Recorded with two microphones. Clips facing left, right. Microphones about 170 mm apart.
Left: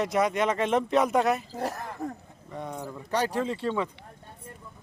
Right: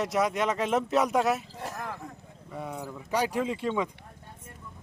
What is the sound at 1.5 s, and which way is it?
Speech, 40° left (ahead or behind).